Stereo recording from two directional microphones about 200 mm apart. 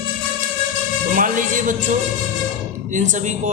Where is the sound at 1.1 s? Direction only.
40° right (ahead or behind).